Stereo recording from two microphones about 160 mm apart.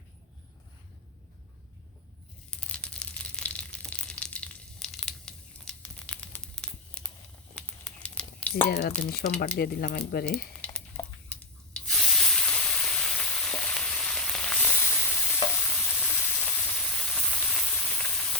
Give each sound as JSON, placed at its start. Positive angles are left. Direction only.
{"t": 2.5, "sound": "crumpling", "side_deg": 5}
{"t": 8.5, "sound": "speech", "side_deg": 35}
{"t": 9.6, "sound": "speech", "side_deg": 70}
{"t": 10.2, "sound": "a sound", "side_deg": 5}
{"t": 11.3, "sound": "rub", "side_deg": 10}
{"t": 11.9, "sound": "sizzle", "side_deg": 0}